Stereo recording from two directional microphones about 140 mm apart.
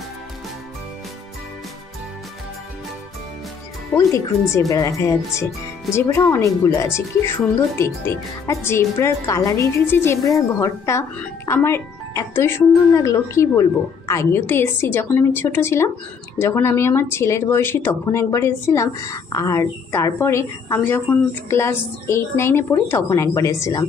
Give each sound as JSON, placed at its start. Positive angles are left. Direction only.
{"t": 3.9, "sound": "speech", "side_deg": 20}